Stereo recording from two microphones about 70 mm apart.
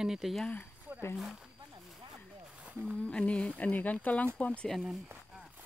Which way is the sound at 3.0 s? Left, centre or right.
Centre.